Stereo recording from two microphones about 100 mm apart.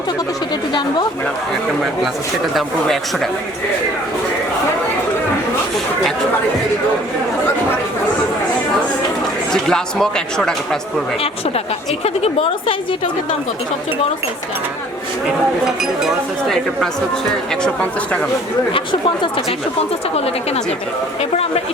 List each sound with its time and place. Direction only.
2.6 s speech: centre (ahead or behind)
9.5 s speech: 5° left (ahead or behind)
11.2 s a woman's voice: 75° left (ahead or behind)
15.6 s speech: 5° right (ahead or behind)
18.7 s speech: 55° left (ahead or behind)
20.1 s speech: 90° left